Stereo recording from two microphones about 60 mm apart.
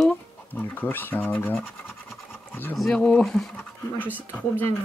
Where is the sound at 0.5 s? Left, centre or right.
Left.